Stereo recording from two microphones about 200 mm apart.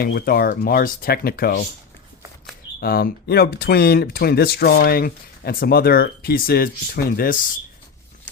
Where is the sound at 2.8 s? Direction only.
50° left (ahead or behind).